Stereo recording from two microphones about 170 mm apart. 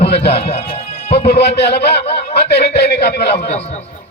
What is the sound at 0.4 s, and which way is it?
Music, 35° left (ahead or behind).